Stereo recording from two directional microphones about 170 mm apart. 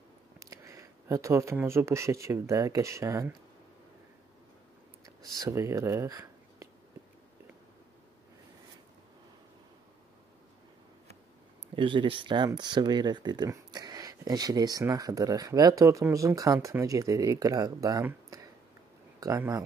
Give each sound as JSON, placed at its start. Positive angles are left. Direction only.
{"t": 0.4, "sound": "speech", "side_deg": -20}
{"t": 5.2, "sound": "speech", "side_deg": -20}
{"t": 11.7, "sound": "speech", "side_deg": -30}